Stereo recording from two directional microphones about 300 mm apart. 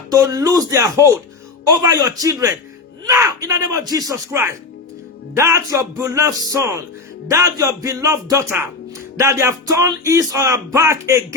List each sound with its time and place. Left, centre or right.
0.1 s speech: centre